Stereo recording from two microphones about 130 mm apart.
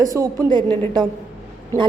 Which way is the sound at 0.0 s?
30° right (ahead or behind).